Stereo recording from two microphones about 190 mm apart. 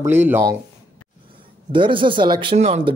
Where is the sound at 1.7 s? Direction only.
25° right (ahead or behind).